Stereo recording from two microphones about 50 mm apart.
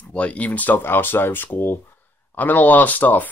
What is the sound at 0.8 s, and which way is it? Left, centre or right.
Speech, left.